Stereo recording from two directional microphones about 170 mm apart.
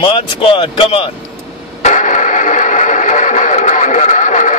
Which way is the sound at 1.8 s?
45° left (ahead or behind).